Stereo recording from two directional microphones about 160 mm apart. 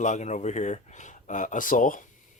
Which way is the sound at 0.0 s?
45° left (ahead or behind).